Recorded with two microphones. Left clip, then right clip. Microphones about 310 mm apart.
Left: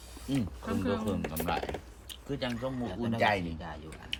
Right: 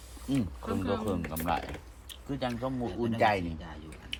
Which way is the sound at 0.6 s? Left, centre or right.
Centre.